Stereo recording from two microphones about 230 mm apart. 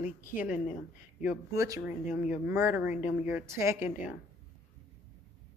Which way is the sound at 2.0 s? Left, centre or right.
Left.